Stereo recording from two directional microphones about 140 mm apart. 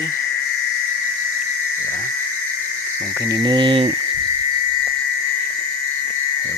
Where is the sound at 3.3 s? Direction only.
30° right (ahead or behind).